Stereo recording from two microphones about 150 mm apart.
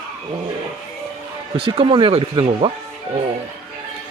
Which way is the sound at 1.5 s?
35° right (ahead or behind).